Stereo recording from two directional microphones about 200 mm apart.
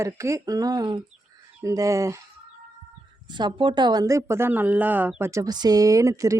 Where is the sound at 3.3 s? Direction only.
25° right (ahead or behind).